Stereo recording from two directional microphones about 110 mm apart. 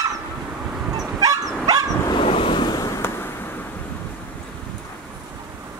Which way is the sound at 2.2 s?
55° left (ahead or behind).